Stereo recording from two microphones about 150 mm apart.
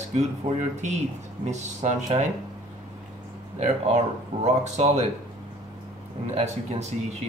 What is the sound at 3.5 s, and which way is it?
Speech, 50° right (ahead or behind).